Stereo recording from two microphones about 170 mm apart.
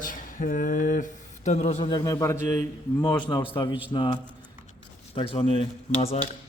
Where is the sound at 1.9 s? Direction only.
25° left (ahead or behind).